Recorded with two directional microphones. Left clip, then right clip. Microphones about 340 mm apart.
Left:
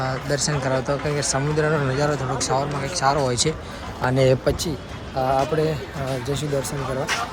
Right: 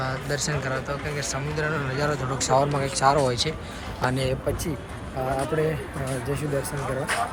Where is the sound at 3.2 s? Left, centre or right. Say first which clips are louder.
Left 3 dB; centre.